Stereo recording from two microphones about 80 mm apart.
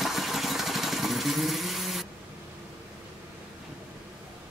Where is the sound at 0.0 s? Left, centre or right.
Centre.